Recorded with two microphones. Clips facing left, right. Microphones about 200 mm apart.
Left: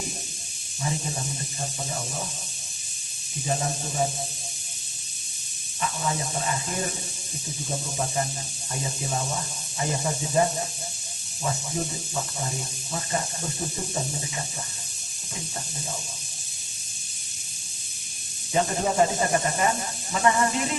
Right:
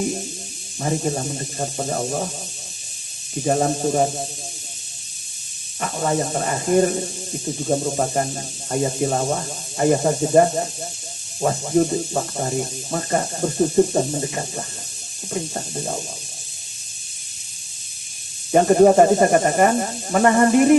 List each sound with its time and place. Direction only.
0.8 s speech: 55° right (ahead or behind)
3.4 s speech: 55° right (ahead or behind)
5.8 s speech: 55° right (ahead or behind)
18.5 s speech: 55° right (ahead or behind)